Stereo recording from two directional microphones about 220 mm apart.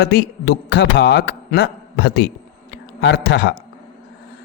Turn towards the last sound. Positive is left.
turn(degrees=50)  # may be behind; listen again after turning